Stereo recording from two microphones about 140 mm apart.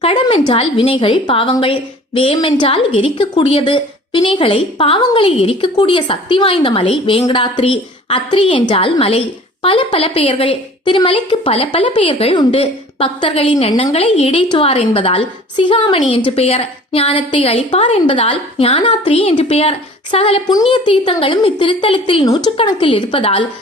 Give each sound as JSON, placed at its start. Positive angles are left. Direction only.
{"t": 0.0, "sound": "a woman's voice", "side_deg": 40}